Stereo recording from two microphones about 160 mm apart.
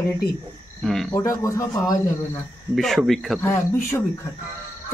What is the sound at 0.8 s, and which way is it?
Speech, centre (ahead or behind).